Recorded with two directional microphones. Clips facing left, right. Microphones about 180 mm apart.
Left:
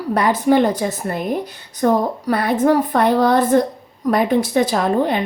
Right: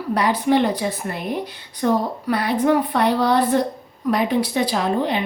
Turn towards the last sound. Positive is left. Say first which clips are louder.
# left 3 dB
turn(degrees=45)  # may be behind; listen again after turning